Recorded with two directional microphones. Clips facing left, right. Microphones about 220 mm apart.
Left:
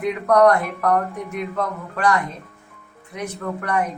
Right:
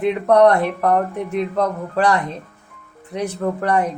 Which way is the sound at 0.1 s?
30° right (ahead or behind).